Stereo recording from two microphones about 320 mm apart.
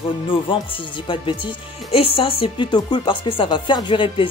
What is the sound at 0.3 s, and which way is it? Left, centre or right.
Speech, centre.